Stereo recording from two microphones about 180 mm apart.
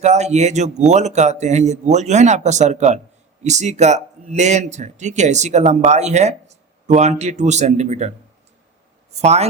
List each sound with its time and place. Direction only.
0.0 s speech: 40° right (ahead or behind)
9.2 s speech: 35° right (ahead or behind)